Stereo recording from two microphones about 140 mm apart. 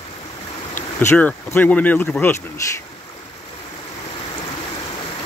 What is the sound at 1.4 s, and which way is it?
Speech, 15° left (ahead or behind).